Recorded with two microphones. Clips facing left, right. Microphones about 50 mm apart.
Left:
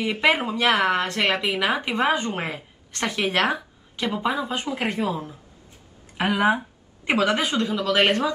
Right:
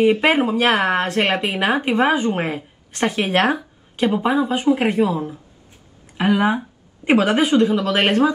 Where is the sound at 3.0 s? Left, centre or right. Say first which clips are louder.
Right 5 dB; right.